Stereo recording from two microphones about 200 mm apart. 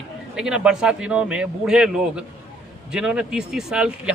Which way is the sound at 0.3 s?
5° right (ahead or behind).